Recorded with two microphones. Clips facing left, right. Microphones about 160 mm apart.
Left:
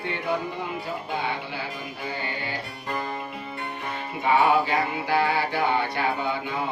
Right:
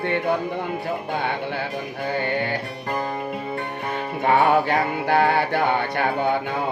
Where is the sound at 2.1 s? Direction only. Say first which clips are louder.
Right 9 dB; 55° right (ahead or behind).